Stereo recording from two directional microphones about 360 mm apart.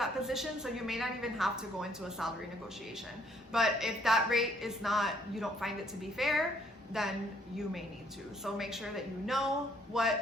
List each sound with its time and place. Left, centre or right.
0.0 s a woman's voice: centre
3.5 s a woman's voice: centre